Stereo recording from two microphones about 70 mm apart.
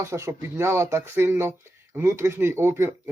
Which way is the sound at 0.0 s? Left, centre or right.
Right.